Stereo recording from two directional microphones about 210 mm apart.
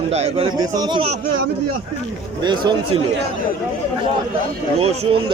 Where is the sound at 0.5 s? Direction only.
20° right (ahead or behind).